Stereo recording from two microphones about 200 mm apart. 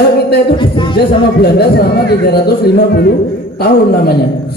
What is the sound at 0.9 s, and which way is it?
Speech, 50° left (ahead or behind).